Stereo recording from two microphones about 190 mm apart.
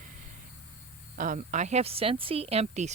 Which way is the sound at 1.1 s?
45° right (ahead or behind).